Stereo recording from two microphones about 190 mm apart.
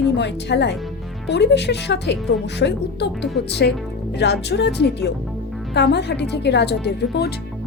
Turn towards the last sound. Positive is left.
turn(degrees=60)  # may be behind; listen again after turning